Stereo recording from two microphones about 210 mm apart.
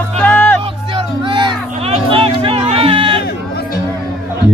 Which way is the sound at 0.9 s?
25° right (ahead or behind).